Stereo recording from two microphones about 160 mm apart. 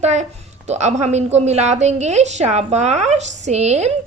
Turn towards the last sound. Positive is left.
turn(degrees=-45)  # may be behind; listen again after turning